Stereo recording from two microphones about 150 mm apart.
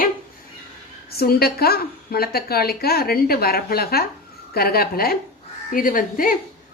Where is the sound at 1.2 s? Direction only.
90° left.